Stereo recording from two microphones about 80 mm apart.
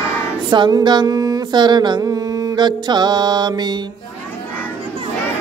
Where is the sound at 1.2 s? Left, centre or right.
Right.